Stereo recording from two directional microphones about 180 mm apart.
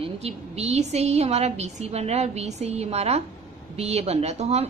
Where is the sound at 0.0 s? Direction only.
35° right (ahead or behind).